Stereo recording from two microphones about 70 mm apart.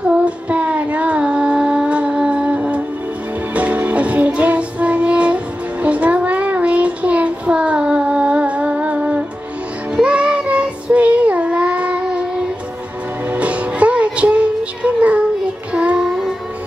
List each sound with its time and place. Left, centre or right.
0.0 s child singing: centre
3.5 s music: right
9.9 s child singing: centre
13.3 s music: centre
15.7 s child singing: centre
16.1 s music: centre